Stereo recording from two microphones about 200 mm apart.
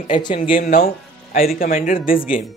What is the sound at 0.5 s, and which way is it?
Speech, 45° left (ahead or behind).